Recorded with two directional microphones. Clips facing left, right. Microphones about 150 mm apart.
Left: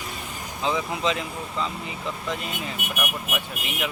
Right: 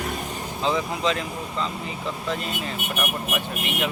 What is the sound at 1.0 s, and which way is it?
Speech, 15° left (ahead or behind).